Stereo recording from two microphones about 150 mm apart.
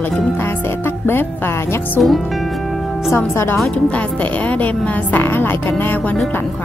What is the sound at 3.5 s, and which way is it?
A woman's voice, 5° left (ahead or behind).